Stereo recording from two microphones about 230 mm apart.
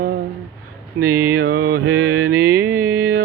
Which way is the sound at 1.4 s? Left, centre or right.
Right.